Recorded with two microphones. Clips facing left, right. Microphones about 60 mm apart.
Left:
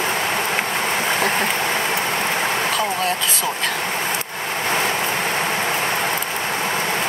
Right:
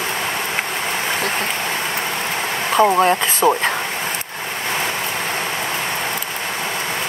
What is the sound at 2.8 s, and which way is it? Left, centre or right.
Speech, right.